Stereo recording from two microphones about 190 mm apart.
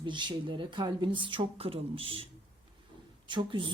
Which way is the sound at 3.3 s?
25° right (ahead or behind).